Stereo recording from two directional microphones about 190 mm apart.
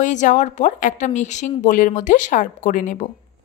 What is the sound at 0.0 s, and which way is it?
A woman's voice, 40° left (ahead or behind).